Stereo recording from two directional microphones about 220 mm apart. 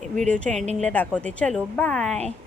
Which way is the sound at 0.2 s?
5° left (ahead or behind).